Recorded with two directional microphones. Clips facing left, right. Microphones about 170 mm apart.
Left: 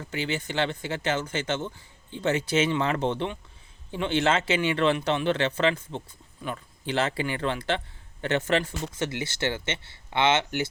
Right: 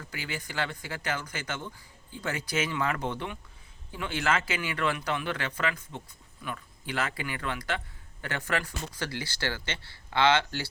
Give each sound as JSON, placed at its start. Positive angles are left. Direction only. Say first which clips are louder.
{"t": 0.0, "sound": "speech", "louder": "left 8 dB", "side_deg": 25}